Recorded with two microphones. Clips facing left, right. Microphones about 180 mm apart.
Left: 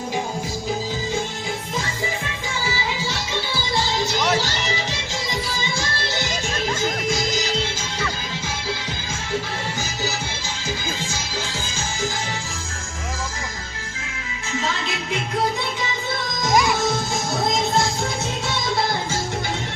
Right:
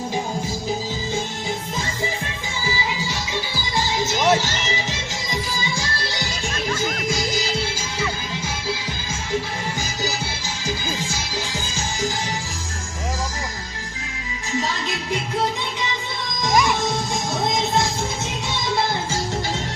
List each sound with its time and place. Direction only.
4.0 s music: 20° right (ahead or behind)
16.4 s music: centre (ahead or behind)